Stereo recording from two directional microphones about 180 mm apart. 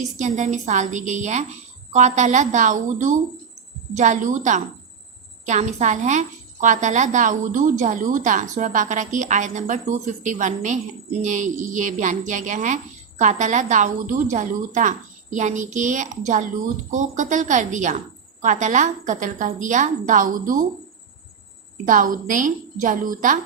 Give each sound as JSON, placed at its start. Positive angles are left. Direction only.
{"t": 0.0, "sound": "a woman's voice", "side_deg": -40}
{"t": 21.8, "sound": "a woman's voice", "side_deg": -45}